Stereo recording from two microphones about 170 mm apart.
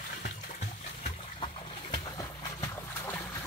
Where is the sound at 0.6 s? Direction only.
35° left (ahead or behind); by 3.2 s 15° left (ahead or behind).